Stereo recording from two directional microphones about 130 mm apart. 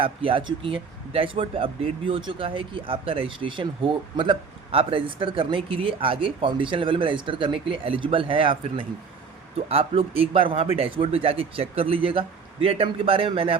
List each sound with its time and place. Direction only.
0.0 s speech: 45° right (ahead or behind)